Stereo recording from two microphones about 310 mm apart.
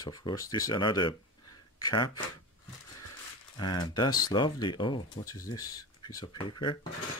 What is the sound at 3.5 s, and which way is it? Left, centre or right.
Speech, centre.